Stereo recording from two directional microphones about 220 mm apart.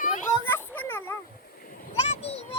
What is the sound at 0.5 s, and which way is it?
Children playing, 10° left (ahead or behind).